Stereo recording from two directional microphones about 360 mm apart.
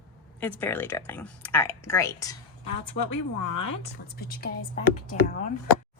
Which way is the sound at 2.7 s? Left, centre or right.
Left.